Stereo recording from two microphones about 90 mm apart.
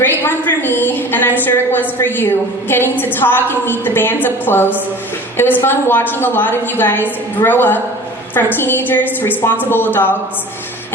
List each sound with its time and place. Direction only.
0.0 s a woman's voice: 25° left (ahead or behind)